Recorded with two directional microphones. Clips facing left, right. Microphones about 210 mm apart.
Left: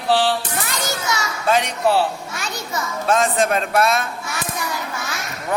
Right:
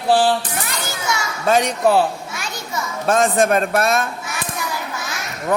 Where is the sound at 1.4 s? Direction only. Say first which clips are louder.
Right 3 dB; 45° right (ahead or behind).